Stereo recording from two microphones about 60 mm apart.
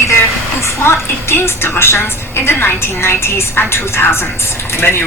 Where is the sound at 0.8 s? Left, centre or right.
Left.